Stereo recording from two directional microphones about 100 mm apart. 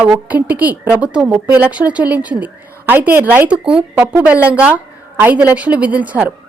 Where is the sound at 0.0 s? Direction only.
15° right (ahead or behind).